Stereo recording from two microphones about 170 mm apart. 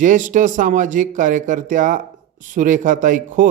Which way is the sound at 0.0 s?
50° right (ahead or behind).